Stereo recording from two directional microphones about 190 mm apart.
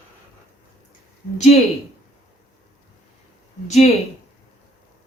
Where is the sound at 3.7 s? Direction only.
35° left (ahead or behind).